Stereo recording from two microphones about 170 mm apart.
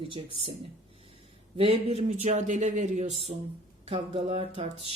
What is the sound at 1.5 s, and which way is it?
Speech, 35° right (ahead or behind).